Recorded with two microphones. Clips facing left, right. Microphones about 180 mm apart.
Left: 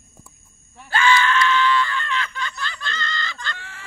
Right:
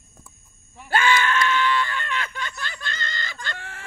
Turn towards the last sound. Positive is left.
turn(degrees=-50)  # may be behind; listen again after turning